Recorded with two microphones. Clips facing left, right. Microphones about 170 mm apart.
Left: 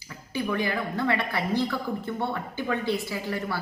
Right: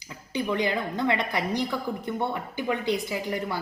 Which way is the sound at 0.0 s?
20° right (ahead or behind).